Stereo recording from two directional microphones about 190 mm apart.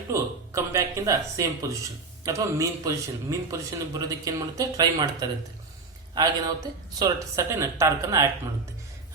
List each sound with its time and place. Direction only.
0.1 s speech: 15° right (ahead or behind)
6.1 s speech: 20° right (ahead or behind)